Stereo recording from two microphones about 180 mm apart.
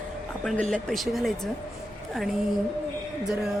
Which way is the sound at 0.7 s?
Centre (ahead or behind).